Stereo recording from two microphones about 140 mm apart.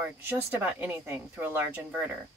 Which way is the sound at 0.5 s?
15° right (ahead or behind).